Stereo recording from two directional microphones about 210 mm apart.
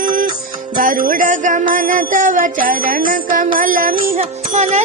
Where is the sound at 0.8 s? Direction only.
40° right (ahead or behind).